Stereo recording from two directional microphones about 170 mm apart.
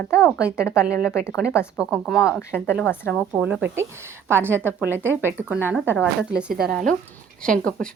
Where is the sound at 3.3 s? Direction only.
10° right (ahead or behind).